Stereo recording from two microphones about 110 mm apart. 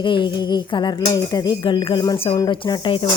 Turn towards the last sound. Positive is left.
turn(degrees=50)  # may be behind; listen again after turning